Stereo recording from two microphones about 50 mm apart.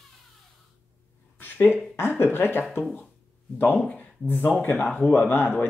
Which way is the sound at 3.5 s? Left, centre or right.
Left.